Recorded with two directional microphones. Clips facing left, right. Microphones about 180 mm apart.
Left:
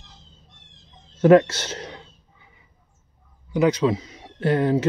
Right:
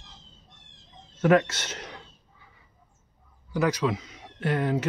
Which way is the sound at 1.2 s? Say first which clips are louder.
Left 7 dB; 35° left (ahead or behind).